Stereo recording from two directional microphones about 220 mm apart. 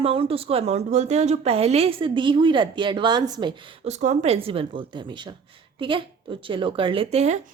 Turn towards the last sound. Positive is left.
turn(degrees=-30)  # may be behind; listen again after turning